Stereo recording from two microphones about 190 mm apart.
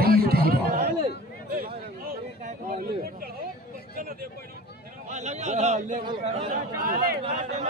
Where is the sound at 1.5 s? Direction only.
50° right (ahead or behind).